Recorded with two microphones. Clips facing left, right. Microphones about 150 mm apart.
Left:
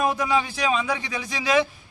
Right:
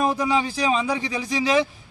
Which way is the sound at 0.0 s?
30° right (ahead or behind).